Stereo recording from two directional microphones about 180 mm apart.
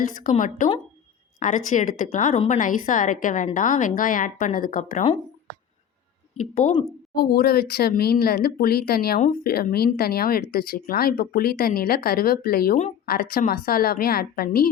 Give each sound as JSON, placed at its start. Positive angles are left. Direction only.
{"t": 0.0, "sound": "a woman's voice", "side_deg": 45}
{"t": 6.3, "sound": "speech", "side_deg": 40}
{"t": 7.1, "sound": "speech", "side_deg": 60}